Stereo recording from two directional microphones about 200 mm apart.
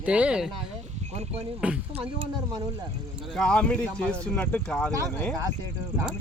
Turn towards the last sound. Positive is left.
turn(degrees=10)  # may be behind; listen again after turning